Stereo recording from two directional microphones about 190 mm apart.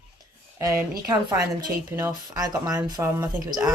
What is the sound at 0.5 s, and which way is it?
A woman's voice, 15° right (ahead or behind).